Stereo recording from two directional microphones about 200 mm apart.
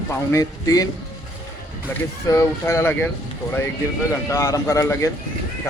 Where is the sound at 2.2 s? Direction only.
15° left (ahead or behind).